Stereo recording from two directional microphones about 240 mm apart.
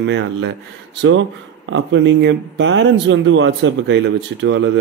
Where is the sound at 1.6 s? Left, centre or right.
Right.